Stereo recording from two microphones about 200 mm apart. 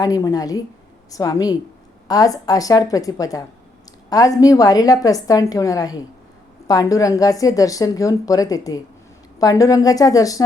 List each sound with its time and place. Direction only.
0.0 s a woman's voice: 15° left (ahead or behind)